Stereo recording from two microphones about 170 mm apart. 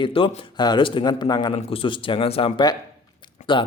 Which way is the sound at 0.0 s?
30° left (ahead or behind).